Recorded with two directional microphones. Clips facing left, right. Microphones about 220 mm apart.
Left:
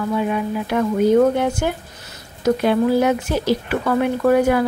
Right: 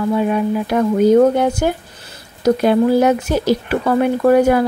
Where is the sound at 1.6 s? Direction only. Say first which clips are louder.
Right 4 dB; 40° right (ahead or behind).